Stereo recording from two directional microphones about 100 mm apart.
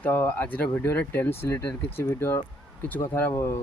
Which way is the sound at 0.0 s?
20° left (ahead or behind).